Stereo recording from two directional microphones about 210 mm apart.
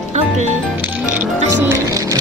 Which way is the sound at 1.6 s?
15° right (ahead or behind).